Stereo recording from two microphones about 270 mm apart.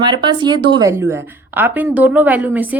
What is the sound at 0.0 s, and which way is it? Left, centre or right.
A woman's voice, centre.